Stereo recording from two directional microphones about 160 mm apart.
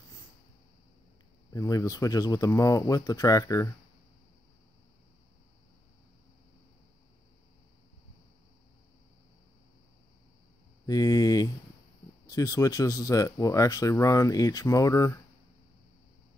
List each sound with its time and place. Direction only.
1.5 s speech: 20° left (ahead or behind)
10.9 s speech: 20° left (ahead or behind)